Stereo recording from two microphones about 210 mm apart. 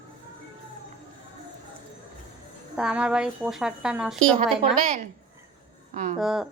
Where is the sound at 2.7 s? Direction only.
5° right (ahead or behind).